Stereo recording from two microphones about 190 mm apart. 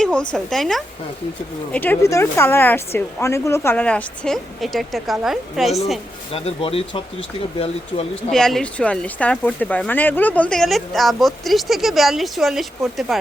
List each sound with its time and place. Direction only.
0.0 s speech: 5° left (ahead or behind)
6.3 s speech: 30° left (ahead or behind)
8.1 s speech: centre (ahead or behind)